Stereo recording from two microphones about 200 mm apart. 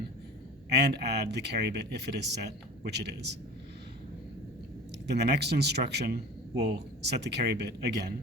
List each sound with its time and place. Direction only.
0.7 s speech: 55° right (ahead or behind)
5.2 s speech: 55° right (ahead or behind)